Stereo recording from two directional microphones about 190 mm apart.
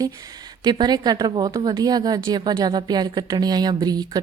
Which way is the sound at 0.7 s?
20° right (ahead or behind).